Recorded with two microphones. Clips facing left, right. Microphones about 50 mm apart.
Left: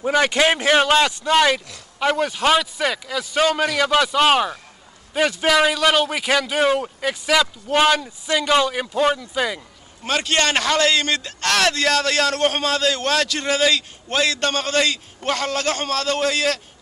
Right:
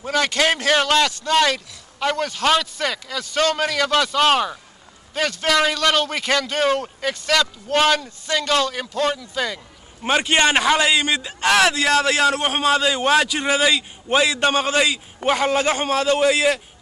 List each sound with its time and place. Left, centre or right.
0.0 s a man's voice: centre
10.0 s a man's voice: right